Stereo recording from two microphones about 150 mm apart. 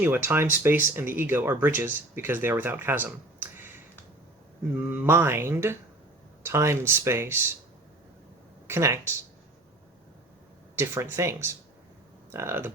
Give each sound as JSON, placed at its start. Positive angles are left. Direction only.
{"t": 0.0, "sound": "speech", "side_deg": -15}
{"t": 4.7, "sound": "speech", "side_deg": -10}
{"t": 8.6, "sound": "speech", "side_deg": -20}
{"t": 10.8, "sound": "speech", "side_deg": -20}